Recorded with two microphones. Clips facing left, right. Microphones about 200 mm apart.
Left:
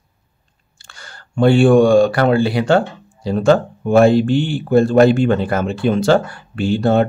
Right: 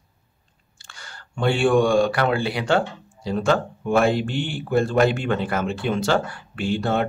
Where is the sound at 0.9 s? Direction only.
40° left (ahead or behind).